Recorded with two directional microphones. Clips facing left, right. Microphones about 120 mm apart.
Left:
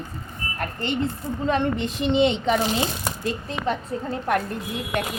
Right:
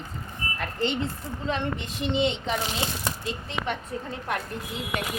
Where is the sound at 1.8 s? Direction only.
70° left (ahead or behind).